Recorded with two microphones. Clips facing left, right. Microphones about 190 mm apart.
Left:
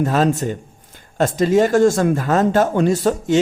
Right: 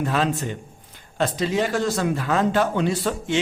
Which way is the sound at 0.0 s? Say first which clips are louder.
Left 6 dB; 40° left (ahead or behind).